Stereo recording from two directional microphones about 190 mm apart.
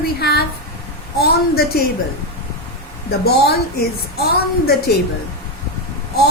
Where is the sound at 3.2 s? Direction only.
55° left (ahead or behind).